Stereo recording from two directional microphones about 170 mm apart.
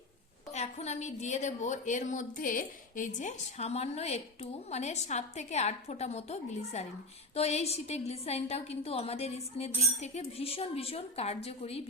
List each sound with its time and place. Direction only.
0.5 s a woman's voice: 40° left (ahead or behind)